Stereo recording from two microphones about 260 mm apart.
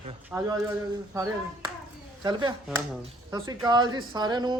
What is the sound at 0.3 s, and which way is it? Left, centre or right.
Speech, centre.